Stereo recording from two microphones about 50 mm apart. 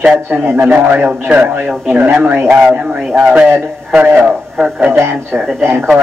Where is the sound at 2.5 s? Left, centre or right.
Centre.